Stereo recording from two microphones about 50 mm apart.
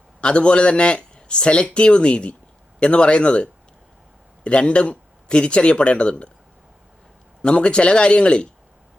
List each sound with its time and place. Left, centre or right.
0.2 s speech: left
7.4 s speech: left